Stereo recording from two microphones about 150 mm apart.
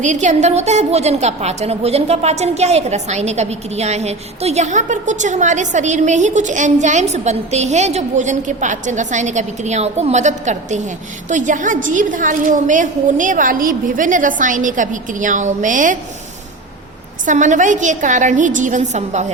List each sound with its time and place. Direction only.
0.0 s a woman's voice: 55° right (ahead or behind)
17.2 s a woman's voice: 55° right (ahead or behind)